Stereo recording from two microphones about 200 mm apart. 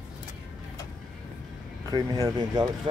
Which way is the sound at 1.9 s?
20° right (ahead or behind).